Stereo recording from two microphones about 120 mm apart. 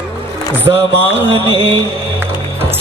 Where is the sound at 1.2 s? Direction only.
50° right (ahead or behind).